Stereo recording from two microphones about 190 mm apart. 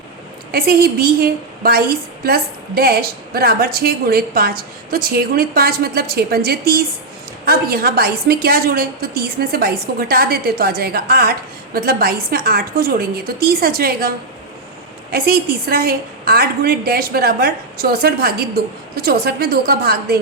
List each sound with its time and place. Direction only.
0.5 s a woman's voice: 50° right (ahead or behind)
15.1 s a woman's voice: 50° right (ahead or behind)